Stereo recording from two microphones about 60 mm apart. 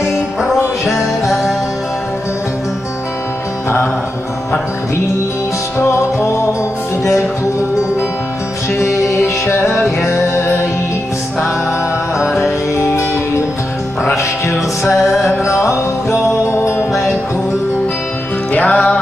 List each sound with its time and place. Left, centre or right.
0.6 s music: left
5.8 s music: left
8.7 s music: left
14.1 s music: left
15.0 s music: centre
15.4 s music: left
18.5 s music: left